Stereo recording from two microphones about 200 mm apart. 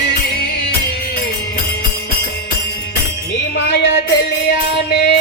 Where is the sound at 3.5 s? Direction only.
55° left (ahead or behind).